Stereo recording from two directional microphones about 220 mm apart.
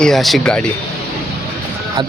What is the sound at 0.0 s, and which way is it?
Speech, centre (ahead or behind).